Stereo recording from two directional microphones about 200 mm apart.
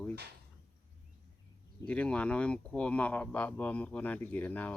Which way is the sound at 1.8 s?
5° left (ahead or behind).